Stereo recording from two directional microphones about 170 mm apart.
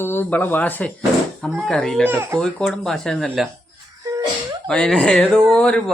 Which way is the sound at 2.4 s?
5° left (ahead or behind).